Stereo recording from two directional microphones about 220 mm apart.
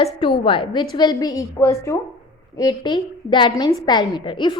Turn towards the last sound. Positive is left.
turn(degrees=20)  # may be behind; listen again after turning